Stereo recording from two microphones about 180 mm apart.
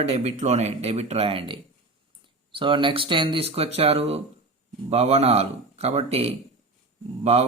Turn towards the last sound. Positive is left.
turn(degrees=-35)  # may be behind; listen again after turning